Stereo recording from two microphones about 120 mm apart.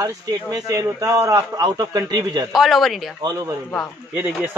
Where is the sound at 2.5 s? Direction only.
Centre (ahead or behind).